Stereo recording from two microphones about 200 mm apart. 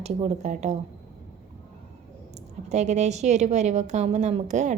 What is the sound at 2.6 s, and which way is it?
A woman's voice, 35° right (ahead or behind).